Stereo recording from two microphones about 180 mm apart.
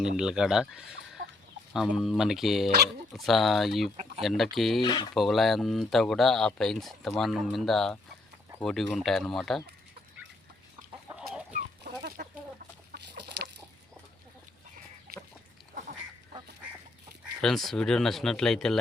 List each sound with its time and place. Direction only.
0.2 s speech: 5° right (ahead or behind)
4.8 s speech: 25° left (ahead or behind)
5.1 s speech: centre (ahead or behind)
11.8 s chicken: 60° right (ahead or behind)
17.4 s speech: centre (ahead or behind)